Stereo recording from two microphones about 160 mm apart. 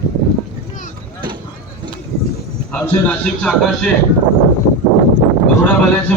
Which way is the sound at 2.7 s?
5° left (ahead or behind).